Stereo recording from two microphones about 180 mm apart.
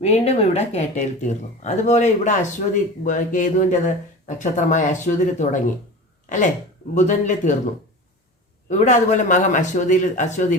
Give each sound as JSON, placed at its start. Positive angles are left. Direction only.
{"t": 0.0, "sound": "speech", "side_deg": 35}
{"t": 8.7, "sound": "speech", "side_deg": 40}